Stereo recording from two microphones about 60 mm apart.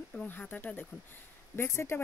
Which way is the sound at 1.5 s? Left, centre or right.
Left.